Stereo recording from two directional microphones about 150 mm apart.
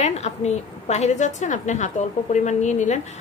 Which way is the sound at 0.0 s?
50° left (ahead or behind).